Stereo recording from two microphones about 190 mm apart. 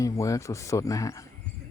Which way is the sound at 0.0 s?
15° left (ahead or behind).